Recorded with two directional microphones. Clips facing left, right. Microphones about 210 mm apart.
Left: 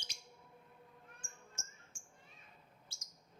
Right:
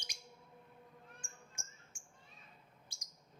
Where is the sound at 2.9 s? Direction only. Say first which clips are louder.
Even; 15° right (ahead or behind).